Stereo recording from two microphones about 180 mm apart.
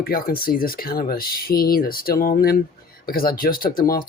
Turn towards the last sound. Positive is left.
turn(degrees=55)  # may be behind; listen again after turning